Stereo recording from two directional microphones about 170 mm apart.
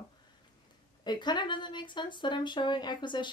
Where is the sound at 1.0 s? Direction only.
25° left (ahead or behind).